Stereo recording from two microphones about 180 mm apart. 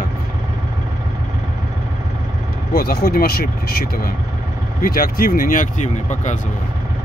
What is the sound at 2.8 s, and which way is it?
Speech, 60° left (ahead or behind).